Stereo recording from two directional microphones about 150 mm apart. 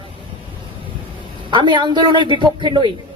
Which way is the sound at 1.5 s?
30° right (ahead or behind).